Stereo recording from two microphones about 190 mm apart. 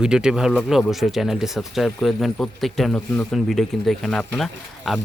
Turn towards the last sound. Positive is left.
turn(degrees=0)  # may be behind; listen again after turning